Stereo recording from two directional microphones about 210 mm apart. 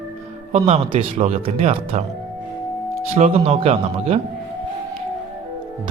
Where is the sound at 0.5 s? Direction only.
30° right (ahead or behind).